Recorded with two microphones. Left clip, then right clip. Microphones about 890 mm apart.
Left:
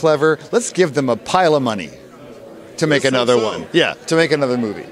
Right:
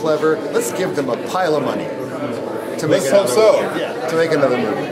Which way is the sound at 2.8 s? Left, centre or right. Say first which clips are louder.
Left 1 dB; left.